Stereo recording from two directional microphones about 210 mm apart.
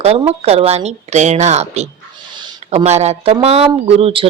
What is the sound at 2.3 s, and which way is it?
Speech, 20° right (ahead or behind).